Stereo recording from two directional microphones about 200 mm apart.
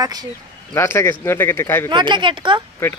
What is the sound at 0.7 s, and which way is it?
Speech, 15° left (ahead or behind).